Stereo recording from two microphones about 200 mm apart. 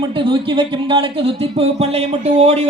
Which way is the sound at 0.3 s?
25° right (ahead or behind).